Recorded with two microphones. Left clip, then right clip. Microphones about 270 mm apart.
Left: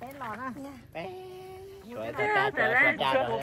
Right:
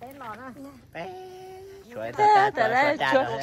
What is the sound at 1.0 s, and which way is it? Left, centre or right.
Sheep, right.